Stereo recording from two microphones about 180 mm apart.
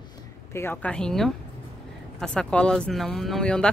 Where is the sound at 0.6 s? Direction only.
10° left (ahead or behind).